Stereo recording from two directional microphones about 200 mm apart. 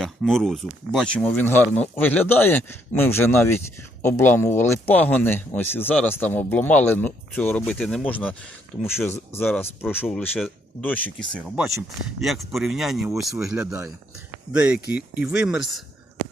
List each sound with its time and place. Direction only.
0.0 s speech: centre (ahead or behind)
9.5 s speech: 10° left (ahead or behind); by 14.8 s 5° right (ahead or behind)
14.8 s speech: 55° left (ahead or behind)
15.1 s speech: 5° right (ahead or behind)